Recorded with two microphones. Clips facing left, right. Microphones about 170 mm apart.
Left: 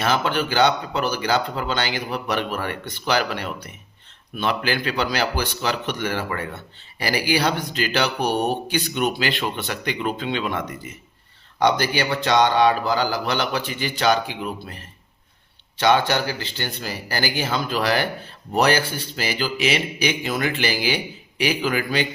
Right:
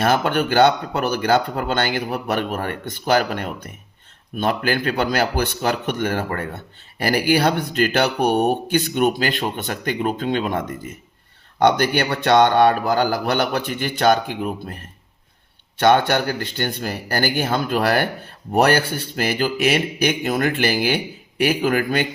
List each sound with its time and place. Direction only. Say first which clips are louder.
0.0 s speech: right 3 dB; 50° right (ahead or behind)